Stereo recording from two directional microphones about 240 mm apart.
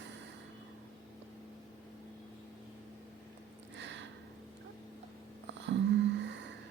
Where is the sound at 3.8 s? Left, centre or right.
Right.